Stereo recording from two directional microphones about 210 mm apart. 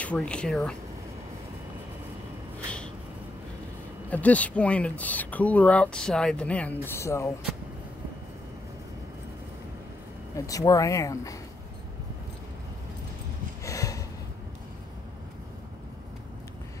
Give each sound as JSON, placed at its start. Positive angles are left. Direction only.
{"t": 0.0, "sound": "speech", "side_deg": 5}
{"t": 4.1, "sound": "speech", "side_deg": 5}
{"t": 10.3, "sound": "speech", "side_deg": 15}
{"t": 13.7, "sound": "a sound", "side_deg": 15}